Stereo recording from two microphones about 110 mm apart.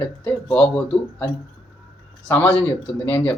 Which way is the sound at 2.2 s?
10° left (ahead or behind).